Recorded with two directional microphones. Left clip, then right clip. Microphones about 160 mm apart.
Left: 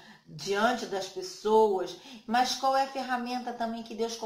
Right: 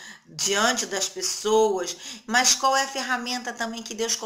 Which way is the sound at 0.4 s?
10° right (ahead or behind).